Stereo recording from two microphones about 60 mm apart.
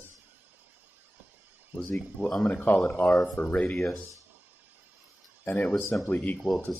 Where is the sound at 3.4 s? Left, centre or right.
Left.